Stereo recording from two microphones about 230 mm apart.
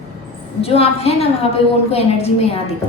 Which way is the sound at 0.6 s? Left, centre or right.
Left.